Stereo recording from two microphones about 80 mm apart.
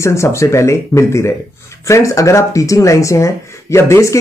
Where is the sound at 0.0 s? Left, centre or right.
Left.